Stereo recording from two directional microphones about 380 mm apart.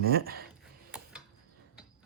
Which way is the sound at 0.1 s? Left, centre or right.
Right.